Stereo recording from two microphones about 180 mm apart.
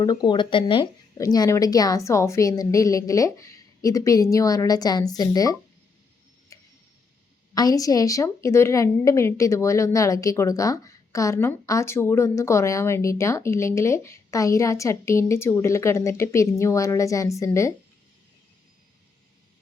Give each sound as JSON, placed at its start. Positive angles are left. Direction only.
{"t": 0.0, "sound": "speech", "side_deg": 25}
{"t": 6.5, "sound": "tick", "side_deg": 15}
{"t": 7.5, "sound": "a woman's voice", "side_deg": 20}